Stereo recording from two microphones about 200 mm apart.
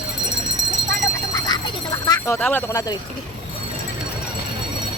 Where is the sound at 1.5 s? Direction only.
20° left (ahead or behind).